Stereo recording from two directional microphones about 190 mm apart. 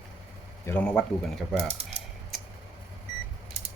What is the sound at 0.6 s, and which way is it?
Speech, 10° left (ahead or behind).